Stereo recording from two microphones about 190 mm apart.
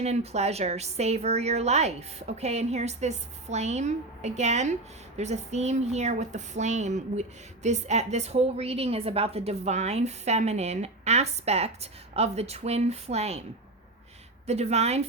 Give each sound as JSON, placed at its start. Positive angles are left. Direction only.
{"t": 0.0, "sound": "speech", "side_deg": -35}
{"t": 14.4, "sound": "speech", "side_deg": -35}